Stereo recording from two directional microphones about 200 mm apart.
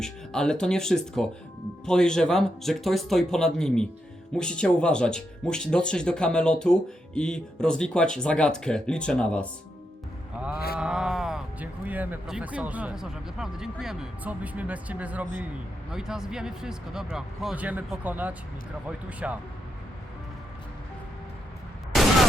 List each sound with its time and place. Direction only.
0.0 s speech: 5° left (ahead or behind)
10.8 s speech: 5° right (ahead or behind)